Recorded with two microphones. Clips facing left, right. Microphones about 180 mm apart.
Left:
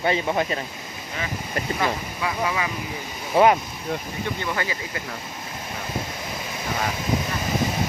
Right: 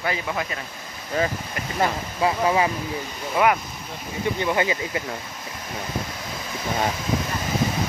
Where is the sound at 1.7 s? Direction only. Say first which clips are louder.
Right 7 dB; 30° right (ahead or behind).